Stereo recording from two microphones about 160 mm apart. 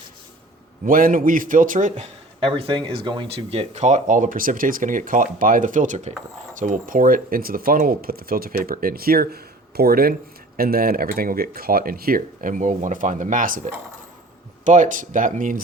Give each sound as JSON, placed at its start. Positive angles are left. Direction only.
{"t": 0.9, "sound": "speech", "side_deg": -60}
{"t": 2.4, "sound": "speech", "side_deg": -35}